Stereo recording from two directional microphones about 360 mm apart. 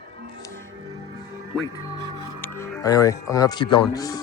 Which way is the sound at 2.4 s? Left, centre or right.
Centre.